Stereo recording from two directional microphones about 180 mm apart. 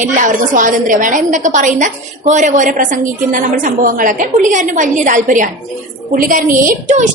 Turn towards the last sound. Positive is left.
turn(degrees=-45)  # may be behind; listen again after turning